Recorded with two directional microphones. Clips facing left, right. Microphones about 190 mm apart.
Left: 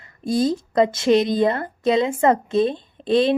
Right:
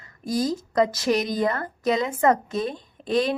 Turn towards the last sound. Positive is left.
turn(degrees=30)  # may be behind; listen again after turning